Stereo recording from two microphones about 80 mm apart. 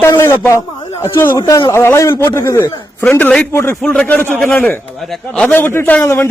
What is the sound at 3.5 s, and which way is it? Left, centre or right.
Speech, left.